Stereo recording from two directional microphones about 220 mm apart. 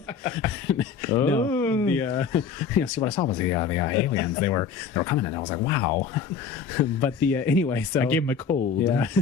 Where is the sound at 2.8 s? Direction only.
20° left (ahead or behind).